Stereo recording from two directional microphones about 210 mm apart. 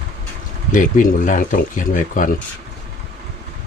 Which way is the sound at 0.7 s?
40° left (ahead or behind).